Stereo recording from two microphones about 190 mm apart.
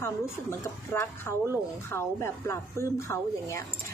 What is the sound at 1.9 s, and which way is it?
A woman's voice, 15° left (ahead or behind).